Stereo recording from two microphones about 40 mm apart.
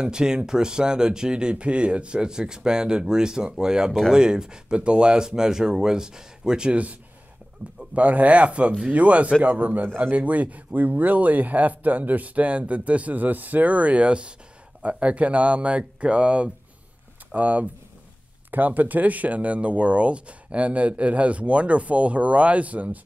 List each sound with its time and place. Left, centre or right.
0.0 s speech: centre
7.9 s a man's voice: right
17.3 s speech: right